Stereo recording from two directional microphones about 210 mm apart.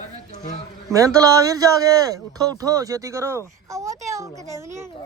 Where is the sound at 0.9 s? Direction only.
15° right (ahead or behind).